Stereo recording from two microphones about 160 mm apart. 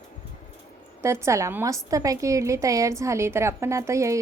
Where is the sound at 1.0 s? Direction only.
15° right (ahead or behind).